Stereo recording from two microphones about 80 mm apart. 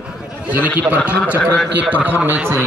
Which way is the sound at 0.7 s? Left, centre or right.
Centre.